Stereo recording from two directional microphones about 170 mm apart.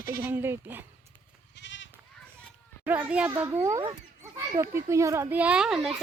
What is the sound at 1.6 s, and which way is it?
Goat, 90° left.